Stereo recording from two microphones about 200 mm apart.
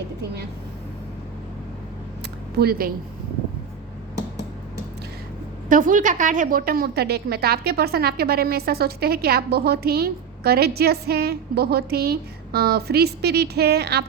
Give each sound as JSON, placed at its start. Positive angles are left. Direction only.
{"t": 2.6, "sound": "a woman's voice", "side_deg": -50}
{"t": 5.6, "sound": "a woman's voice", "side_deg": -40}